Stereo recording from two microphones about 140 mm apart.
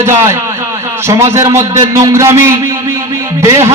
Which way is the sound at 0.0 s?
20° right (ahead or behind).